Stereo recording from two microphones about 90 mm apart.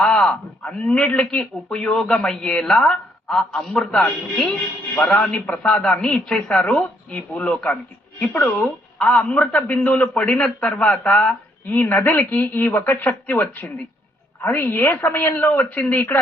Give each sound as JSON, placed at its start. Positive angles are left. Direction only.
{"t": 0.0, "sound": "a man's voice", "side_deg": 10}